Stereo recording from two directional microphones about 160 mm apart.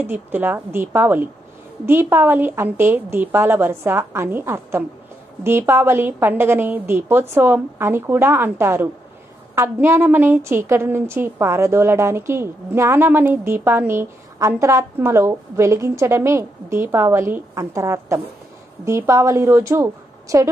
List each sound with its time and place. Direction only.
0.0 s a woman's voice: 10° right (ahead or behind)